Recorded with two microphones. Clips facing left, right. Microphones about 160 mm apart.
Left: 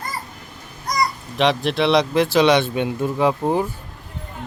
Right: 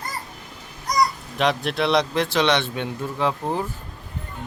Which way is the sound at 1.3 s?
Centre (ahead or behind).